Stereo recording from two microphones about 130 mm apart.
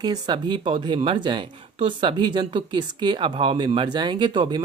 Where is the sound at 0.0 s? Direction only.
35° right (ahead or behind).